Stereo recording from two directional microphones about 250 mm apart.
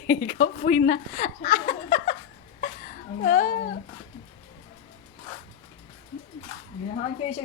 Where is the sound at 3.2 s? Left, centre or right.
Left.